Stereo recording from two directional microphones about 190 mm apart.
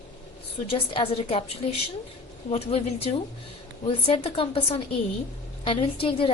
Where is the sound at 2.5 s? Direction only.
30° left (ahead or behind).